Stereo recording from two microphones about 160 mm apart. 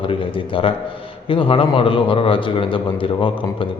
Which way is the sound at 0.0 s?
35° left (ahead or behind).